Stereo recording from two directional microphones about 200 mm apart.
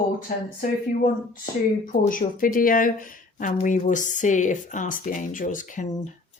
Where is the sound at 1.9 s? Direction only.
45° left (ahead or behind).